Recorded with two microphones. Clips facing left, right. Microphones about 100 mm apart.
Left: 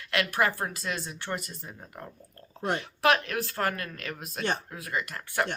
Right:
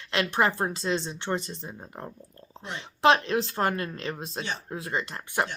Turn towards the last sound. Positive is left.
turn(degrees=-25)  # may be behind; listen again after turning